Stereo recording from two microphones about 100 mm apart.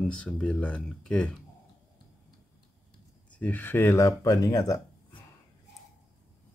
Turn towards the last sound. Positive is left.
turn(degrees=35)  # may be behind; listen again after turning